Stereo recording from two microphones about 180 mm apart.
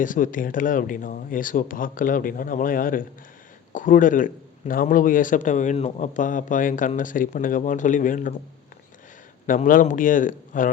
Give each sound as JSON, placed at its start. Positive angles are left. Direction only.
{"t": 0.0, "sound": "speech", "side_deg": 45}
{"t": 9.5, "sound": "speech", "side_deg": 50}